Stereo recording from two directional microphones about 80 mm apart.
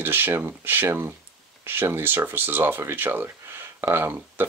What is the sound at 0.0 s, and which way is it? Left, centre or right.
Speech, right.